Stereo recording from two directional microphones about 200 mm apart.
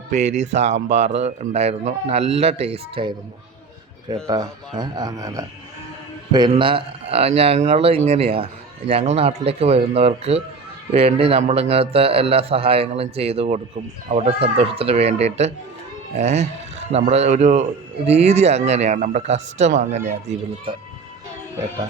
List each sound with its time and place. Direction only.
0.1 s a man's voice: 35° right (ahead or behind); by 5.5 s 15° right (ahead or behind)
6.5 s a man's voice: 25° right (ahead or behind)